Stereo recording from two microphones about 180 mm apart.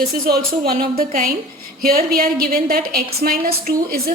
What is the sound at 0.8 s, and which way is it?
A woman's voice, 50° right (ahead or behind).